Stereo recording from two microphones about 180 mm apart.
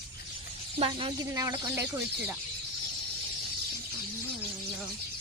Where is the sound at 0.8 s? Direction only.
30° right (ahead or behind); by 1.9 s 15° right (ahead or behind).